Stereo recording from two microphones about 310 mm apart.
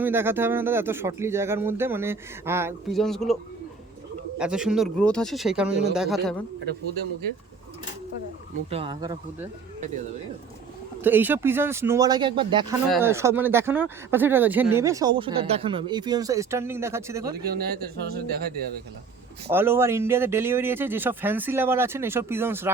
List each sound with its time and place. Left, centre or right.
0.0 s speech: centre
4.4 s speech: centre
8.7 s speech: centre
11.0 s speech: centre
17.4 s speech: right
19.5 s speech: centre